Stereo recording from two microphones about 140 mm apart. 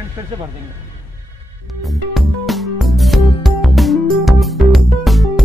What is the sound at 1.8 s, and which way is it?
Music, centre (ahead or behind).